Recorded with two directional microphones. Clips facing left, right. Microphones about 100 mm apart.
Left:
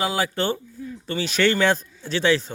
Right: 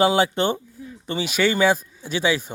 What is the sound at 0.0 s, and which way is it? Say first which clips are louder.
Speech: right 5 dB; 25° right (ahead or behind).